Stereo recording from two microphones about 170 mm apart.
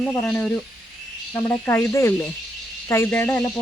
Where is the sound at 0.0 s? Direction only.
5° left (ahead or behind).